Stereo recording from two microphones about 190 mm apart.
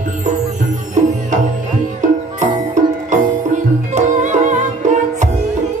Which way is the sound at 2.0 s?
40° right (ahead or behind).